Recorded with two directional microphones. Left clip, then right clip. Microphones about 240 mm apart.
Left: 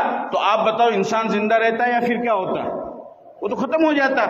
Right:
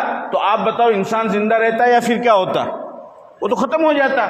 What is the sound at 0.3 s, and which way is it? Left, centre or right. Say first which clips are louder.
A man's voice: right 2 dB; right.